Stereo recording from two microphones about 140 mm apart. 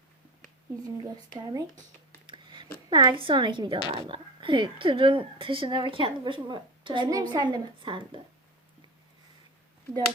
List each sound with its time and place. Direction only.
1.0 s speech: 25° right (ahead or behind)
2.2 s a sound: 35° right (ahead or behind)
2.9 s a woman's voice: 35° right (ahead or behind)